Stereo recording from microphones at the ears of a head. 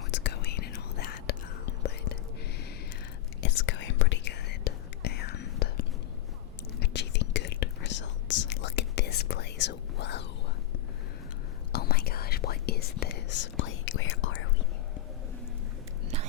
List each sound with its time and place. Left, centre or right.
0.1 s whispering: left
3.4 s whispering: left
6.9 s whispering: left
11.7 s whispering: left